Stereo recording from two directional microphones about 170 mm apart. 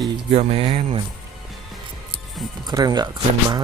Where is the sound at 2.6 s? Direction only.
25° right (ahead or behind).